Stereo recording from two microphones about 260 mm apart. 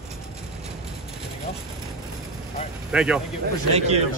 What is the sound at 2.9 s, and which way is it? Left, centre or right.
Speech, centre.